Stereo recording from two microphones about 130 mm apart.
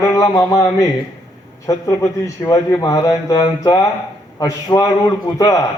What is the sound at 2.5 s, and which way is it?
A man's voice, 30° left (ahead or behind).